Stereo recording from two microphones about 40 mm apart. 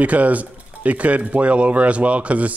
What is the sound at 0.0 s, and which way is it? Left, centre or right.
Speech, right.